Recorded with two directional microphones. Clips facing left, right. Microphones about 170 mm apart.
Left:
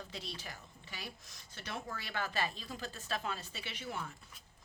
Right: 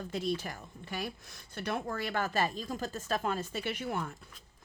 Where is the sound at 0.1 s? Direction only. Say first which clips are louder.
Right 12 dB; 50° right (ahead or behind).